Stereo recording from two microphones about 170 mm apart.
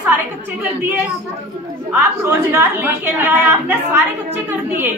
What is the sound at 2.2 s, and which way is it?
A woman's voice, 15° right (ahead or behind).